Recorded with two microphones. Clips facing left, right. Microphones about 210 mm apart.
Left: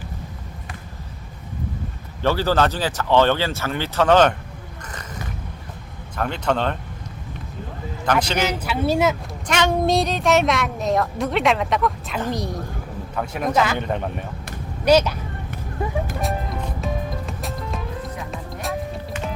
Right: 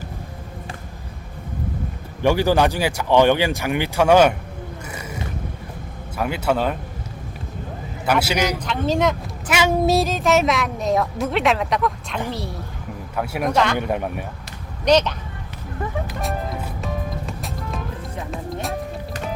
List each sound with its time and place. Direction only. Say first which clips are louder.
2.2 s speech: right 2 dB; 15° right (ahead or behind)
4.9 s a sound: right 1 dB; 10° right (ahead or behind)
6.1 s speech: right 1 dB; 5° right (ahead or behind)
8.0 s speech: right 1 dB; 10° right (ahead or behind)
8.5 s speech: left 1 dB; 10° left (ahead or behind)
9.5 s a woman's voice: right 1 dB; 5° right (ahead or behind)
12.3 s speech: left 3 dB; 15° left (ahead or behind)
13.1 s speech: right 1 dB; 10° right (ahead or behind)
14.8 s speech: left 1 dB; 10° left (ahead or behind)
15.8 s music: left 2 dB; 10° left (ahead or behind)
16.2 s music: left 1 dB; centre (ahead or behind)